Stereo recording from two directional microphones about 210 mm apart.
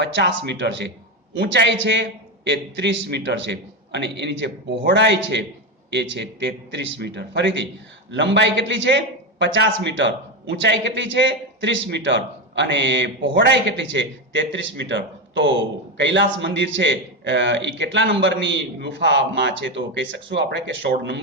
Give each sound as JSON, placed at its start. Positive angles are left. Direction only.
{"t": 0.0, "sound": "a man's voice", "side_deg": -55}